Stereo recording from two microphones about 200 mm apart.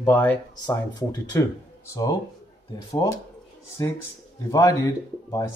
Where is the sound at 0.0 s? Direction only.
10° left (ahead or behind).